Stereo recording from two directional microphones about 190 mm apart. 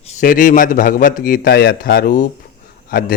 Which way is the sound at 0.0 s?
40° left (ahead or behind).